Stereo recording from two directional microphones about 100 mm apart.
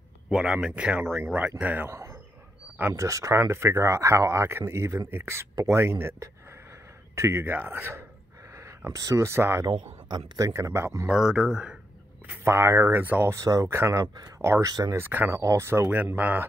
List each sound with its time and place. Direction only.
0.3 s speech: 5° right (ahead or behind)
1.9 s speech: 30° right (ahead or behind)
9.7 s speech: 50° right (ahead or behind)
10.5 s speech: 30° right (ahead or behind)
11.1 s speech: 5° right (ahead or behind)
12.4 s speech: 25° right (ahead or behind)
13.3 s speech: 35° right (ahead or behind)
14.7 s speech: 40° right (ahead or behind)
15.0 s speech: 20° right (ahead or behind)